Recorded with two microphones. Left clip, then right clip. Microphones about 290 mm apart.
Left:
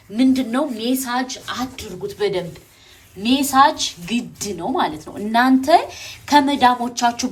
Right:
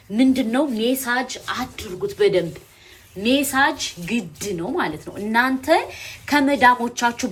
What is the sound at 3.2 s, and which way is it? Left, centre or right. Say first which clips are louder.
A woman's voice: left 4 dB; centre.